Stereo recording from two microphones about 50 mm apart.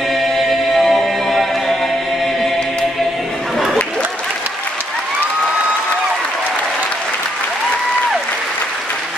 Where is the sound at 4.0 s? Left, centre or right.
Right.